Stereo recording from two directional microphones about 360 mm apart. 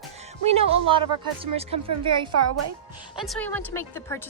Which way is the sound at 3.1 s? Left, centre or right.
Centre.